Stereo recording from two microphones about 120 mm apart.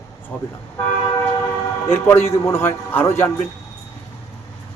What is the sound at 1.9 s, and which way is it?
Speech, 20° left (ahead or behind).